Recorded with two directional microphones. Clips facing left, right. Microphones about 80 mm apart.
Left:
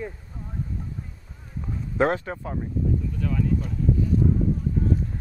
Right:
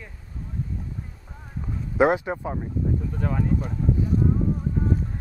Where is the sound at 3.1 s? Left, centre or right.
Right.